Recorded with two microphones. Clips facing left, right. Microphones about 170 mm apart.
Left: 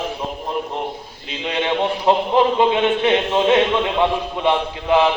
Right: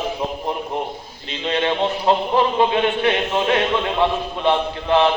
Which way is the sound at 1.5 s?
15° left (ahead or behind).